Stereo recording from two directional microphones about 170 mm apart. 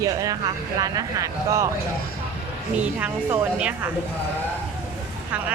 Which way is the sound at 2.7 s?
10° right (ahead or behind).